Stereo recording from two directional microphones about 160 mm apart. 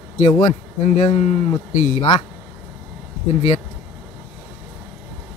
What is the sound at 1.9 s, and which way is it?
Speech, 40° left (ahead or behind).